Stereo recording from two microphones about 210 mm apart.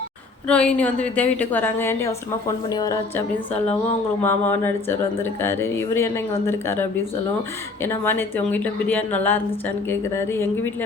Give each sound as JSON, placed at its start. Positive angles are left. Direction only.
{"t": 0.4, "sound": "a woman's voice", "side_deg": 5}